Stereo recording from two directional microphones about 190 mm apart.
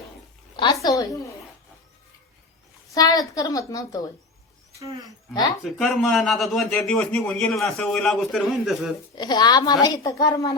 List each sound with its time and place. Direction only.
0.5 s a woman's voice: 25° left (ahead or behind)
2.9 s a woman's voice: 20° left (ahead or behind)
5.6 s a man's voice: centre (ahead or behind)
9.1 s a woman's voice: 20° left (ahead or behind)